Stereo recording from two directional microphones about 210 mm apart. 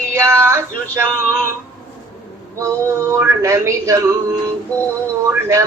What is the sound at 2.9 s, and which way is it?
Speech, 15° right (ahead or behind).